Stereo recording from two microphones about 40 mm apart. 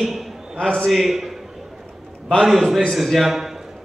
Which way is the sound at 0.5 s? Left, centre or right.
Centre.